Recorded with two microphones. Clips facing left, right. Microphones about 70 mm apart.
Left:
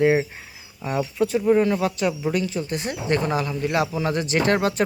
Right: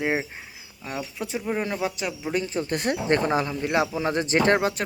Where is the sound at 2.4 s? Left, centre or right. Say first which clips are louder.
Left 1 dB; right.